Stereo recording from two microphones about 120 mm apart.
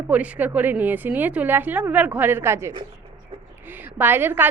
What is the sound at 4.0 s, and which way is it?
Speech, 15° right (ahead or behind).